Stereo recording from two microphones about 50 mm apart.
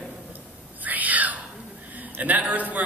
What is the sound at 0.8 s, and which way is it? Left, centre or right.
Whispering, right.